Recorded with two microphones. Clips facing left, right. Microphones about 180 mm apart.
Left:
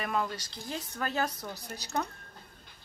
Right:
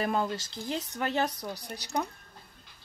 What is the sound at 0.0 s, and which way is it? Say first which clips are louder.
Speech: right 3 dB; 30° right (ahead or behind).